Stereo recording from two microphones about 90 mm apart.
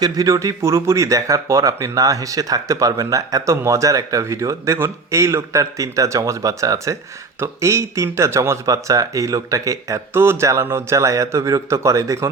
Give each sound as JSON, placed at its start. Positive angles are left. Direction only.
{"t": 0.0, "sound": "speech", "side_deg": -40}